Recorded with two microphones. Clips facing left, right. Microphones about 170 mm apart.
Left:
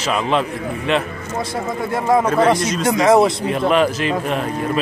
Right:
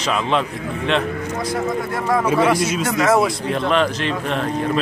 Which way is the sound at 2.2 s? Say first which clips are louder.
Left 1 dB; 5° right (ahead or behind).